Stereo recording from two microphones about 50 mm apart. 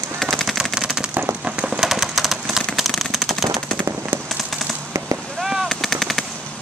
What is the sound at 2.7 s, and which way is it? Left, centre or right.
Machine gun, centre.